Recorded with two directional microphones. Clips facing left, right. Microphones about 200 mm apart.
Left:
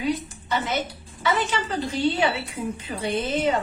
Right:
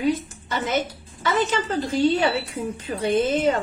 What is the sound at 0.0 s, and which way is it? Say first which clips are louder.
A woman's voice: right 3 dB; 45° right (ahead or behind).